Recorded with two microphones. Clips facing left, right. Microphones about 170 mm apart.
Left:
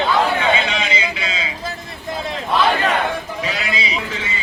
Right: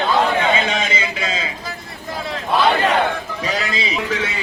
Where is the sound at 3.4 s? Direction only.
45° right (ahead or behind).